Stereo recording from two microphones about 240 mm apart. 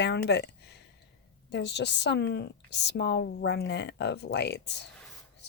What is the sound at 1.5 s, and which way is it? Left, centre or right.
A woman's voice, left.